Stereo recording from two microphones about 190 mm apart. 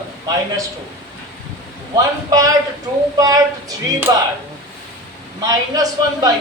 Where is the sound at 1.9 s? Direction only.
20° right (ahead or behind).